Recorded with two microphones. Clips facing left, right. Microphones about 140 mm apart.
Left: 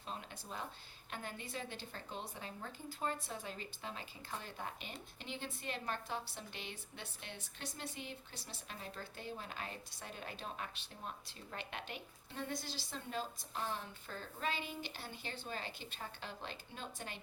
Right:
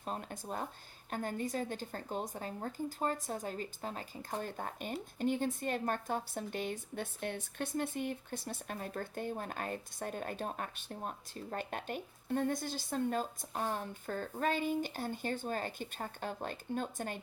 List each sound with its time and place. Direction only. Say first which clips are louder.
0.0 s speech: right 7 dB; 50° right (ahead or behind)